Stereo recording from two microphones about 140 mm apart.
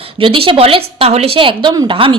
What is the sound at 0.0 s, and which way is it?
A woman's voice, 40° right (ahead or behind).